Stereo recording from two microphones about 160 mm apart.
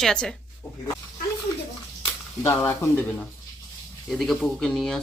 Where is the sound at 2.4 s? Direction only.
15° left (ahead or behind).